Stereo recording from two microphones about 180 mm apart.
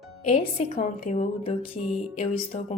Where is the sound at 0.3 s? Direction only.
35° left (ahead or behind).